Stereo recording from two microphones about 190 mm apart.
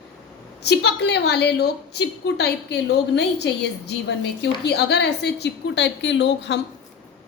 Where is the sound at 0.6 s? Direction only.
60° left (ahead or behind).